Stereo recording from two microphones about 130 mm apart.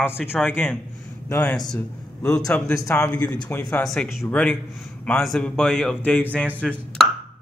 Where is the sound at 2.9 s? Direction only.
20° left (ahead or behind).